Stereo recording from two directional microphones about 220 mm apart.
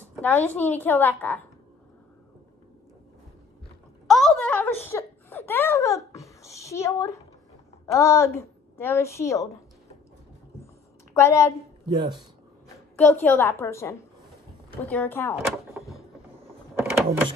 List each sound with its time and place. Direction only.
0.2 s a woman's voice: 5° left (ahead or behind)
4.1 s a sound: centre (ahead or behind)
7.8 s a woman's voice: 10° left (ahead or behind)
11.1 s a woman's voice: 10° left (ahead or behind)
11.9 s speech: 20° right (ahead or behind)
12.9 s a woman's voice: 10° left (ahead or behind)
16.9 s mechanisms: centre (ahead or behind)